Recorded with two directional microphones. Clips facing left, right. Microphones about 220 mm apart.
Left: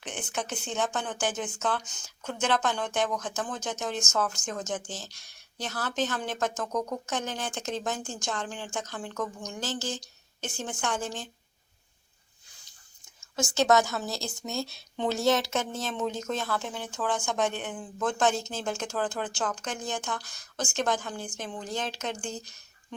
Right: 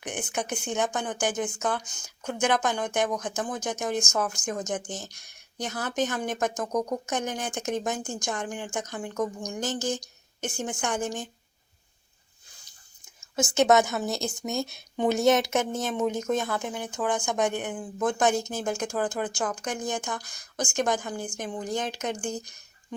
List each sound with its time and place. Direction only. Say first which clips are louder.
0.0 s speech: right 3 dB; 15° right (ahead or behind)
13.1 s speech: right 4 dB; 20° right (ahead or behind)